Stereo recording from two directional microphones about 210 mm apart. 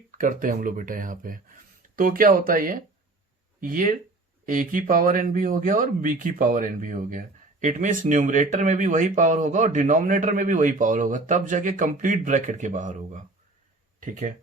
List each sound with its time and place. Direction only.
0.2 s speech: 40° right (ahead or behind)